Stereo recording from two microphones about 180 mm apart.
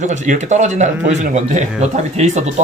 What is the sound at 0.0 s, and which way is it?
A man's voice, 45° right (ahead or behind).